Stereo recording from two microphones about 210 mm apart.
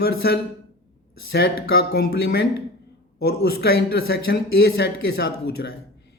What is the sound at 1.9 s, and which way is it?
Speech, 45° left (ahead or behind).